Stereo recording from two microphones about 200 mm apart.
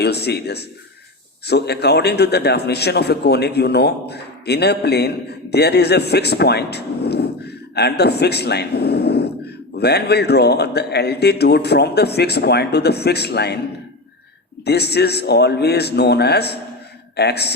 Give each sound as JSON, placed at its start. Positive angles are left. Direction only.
{"t": 0.0, "sound": "a man's voice", "side_deg": 55}
{"t": 14.6, "sound": "a man's voice", "side_deg": 55}